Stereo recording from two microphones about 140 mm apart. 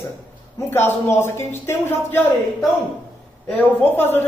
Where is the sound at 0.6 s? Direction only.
15° left (ahead or behind).